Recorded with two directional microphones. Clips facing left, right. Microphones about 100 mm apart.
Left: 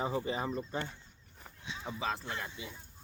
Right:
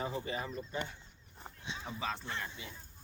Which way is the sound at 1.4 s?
20° right (ahead or behind).